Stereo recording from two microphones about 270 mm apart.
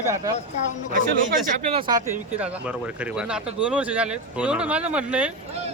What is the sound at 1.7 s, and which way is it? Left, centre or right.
Speech, centre.